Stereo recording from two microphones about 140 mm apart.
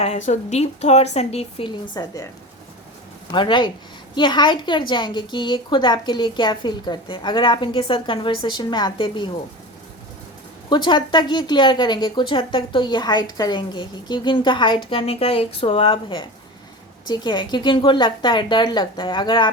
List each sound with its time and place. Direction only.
0.0 s a woman's voice: 55° left (ahead or behind); by 2.2 s 30° left (ahead or behind)
3.3 s a woman's voice: 35° left (ahead or behind)
10.7 s a woman's voice: 35° left (ahead or behind)